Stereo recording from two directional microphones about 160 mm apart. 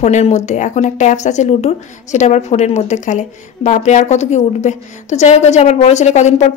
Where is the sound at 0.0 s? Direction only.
45° left (ahead or behind).